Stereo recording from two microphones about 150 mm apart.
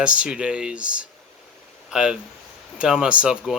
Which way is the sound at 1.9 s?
5° right (ahead or behind).